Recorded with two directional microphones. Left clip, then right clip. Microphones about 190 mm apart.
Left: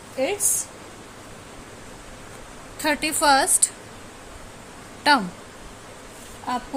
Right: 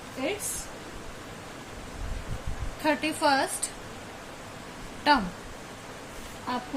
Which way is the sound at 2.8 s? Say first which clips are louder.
Left 4 dB; 55° left (ahead or behind).